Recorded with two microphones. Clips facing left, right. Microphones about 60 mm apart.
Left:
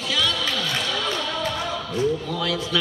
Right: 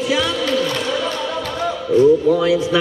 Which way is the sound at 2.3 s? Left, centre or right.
Right.